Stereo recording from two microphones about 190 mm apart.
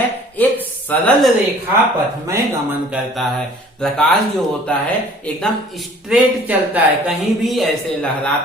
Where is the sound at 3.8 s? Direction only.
5° left (ahead or behind).